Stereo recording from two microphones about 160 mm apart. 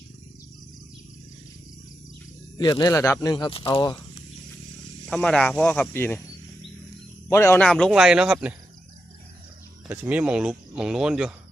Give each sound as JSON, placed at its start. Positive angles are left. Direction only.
{"t": 2.6, "sound": "speech", "side_deg": 25}
{"t": 5.0, "sound": "speech", "side_deg": 5}
{"t": 7.3, "sound": "speech", "side_deg": 15}
{"t": 7.6, "sound": "speech", "side_deg": 0}
{"t": 9.9, "sound": "speech", "side_deg": -10}